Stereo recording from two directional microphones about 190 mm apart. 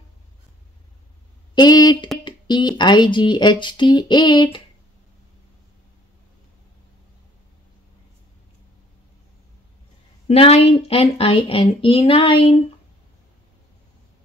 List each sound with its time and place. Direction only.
1.5 s speech: 20° left (ahead or behind)
10.2 s a woman's voice: 35° left (ahead or behind)